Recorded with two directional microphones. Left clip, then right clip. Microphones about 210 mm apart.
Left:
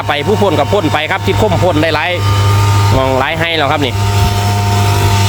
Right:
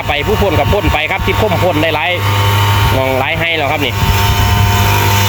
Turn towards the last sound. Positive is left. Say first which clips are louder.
# right 2 dB
turn(degrees=5)  # may be behind; listen again after turning